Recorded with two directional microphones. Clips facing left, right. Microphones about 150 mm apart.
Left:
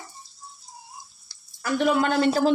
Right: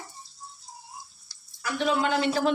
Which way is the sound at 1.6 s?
50° left (ahead or behind).